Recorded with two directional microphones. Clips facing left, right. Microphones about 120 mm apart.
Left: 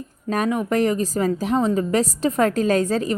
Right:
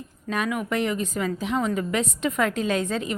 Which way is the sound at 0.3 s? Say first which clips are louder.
Left 5 dB; 40° left (ahead or behind).